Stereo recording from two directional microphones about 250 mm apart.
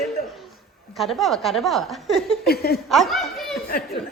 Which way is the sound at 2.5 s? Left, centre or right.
Left.